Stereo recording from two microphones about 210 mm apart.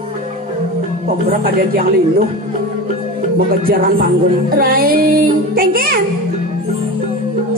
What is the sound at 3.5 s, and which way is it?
Music, 45° right (ahead or behind).